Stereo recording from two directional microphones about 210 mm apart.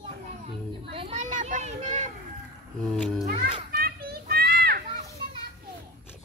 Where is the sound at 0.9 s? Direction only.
25° right (ahead or behind).